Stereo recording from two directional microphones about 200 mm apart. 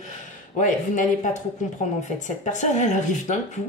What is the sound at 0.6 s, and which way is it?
Speech, 40° left (ahead or behind).